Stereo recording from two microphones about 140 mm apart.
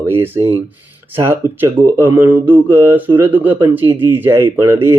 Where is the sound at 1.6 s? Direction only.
20° right (ahead or behind).